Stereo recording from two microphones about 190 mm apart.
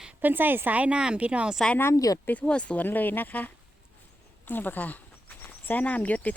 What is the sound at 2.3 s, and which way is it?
Speech, 5° left (ahead or behind).